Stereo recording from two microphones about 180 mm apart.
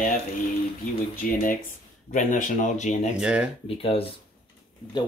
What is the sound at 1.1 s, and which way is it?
Speech, 50° left (ahead or behind).